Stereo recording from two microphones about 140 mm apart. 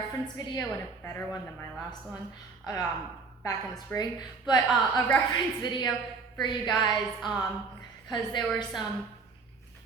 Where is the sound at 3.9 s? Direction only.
30° left (ahead or behind).